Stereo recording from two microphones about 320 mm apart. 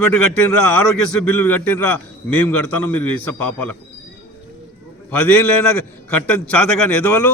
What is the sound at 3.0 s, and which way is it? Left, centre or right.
Speech, left.